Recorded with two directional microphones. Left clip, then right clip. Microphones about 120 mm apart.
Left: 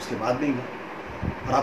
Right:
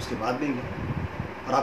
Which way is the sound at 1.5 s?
15° right (ahead or behind).